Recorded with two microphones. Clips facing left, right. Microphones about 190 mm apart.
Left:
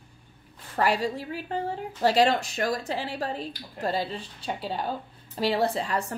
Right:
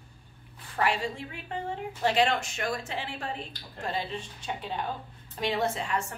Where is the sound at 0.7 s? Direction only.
40° left (ahead or behind).